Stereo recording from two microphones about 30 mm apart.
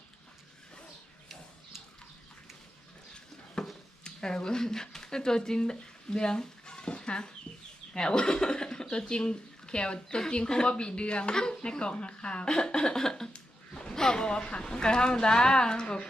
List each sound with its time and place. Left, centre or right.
3.6 s a sound: left
4.0 s speech: left
7.5 s chicken: left
7.9 s speech: left
12.5 s a woman's voice: left
13.3 s a sound: left
13.9 s a woman's voice: left